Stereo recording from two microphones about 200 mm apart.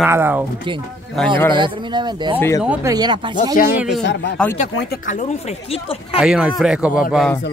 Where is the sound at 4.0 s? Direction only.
60° left (ahead or behind).